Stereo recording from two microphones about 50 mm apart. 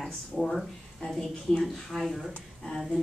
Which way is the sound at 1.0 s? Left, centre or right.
Centre.